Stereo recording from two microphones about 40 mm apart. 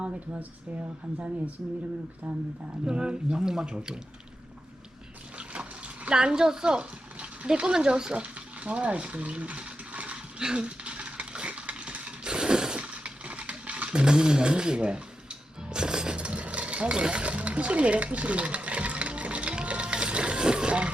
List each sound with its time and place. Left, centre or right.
2.3 s speech: right
2.8 s speech: right
6.1 s speech: right
8.2 s stir: right
10.4 s dog: right
12.8 s a sound: right